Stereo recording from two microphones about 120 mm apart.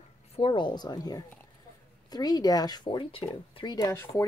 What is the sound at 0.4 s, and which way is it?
Speech, 40° left (ahead or behind).